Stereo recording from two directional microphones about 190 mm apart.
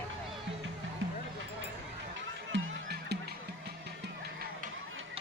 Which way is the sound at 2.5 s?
65° right (ahead or behind).